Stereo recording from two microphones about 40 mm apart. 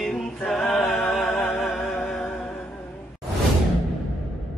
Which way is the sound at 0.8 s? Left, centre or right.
Left.